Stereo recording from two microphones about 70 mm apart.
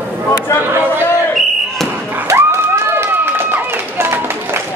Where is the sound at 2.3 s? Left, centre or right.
Right.